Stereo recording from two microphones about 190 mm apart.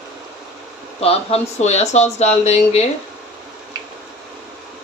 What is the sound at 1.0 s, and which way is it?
Speech, 30° left (ahead or behind).